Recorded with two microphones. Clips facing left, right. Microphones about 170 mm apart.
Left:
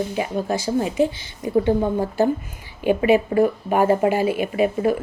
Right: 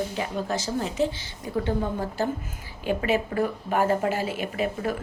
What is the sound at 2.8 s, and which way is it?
A woman's voice, 15° left (ahead or behind).